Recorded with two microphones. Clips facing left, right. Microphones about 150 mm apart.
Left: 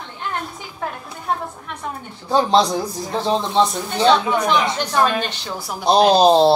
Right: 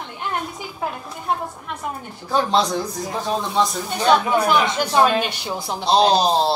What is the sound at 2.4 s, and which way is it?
Speech, 35° left (ahead or behind).